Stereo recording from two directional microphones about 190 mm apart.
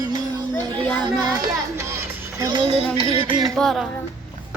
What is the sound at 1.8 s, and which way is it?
Music, 15° right (ahead or behind).